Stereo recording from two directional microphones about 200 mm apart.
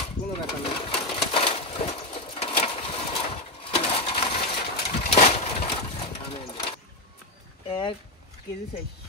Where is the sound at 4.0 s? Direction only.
25° left (ahead or behind).